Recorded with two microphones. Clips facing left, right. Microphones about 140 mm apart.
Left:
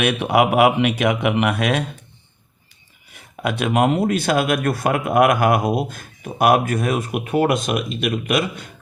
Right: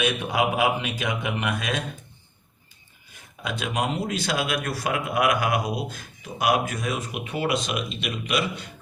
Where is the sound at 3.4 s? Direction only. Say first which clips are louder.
Left 9 dB; 65° left (ahead or behind).